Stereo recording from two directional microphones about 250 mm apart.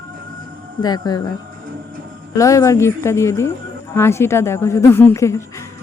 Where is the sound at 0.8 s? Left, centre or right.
Centre.